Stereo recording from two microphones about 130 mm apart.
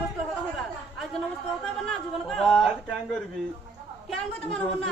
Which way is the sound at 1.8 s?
5° left (ahead or behind).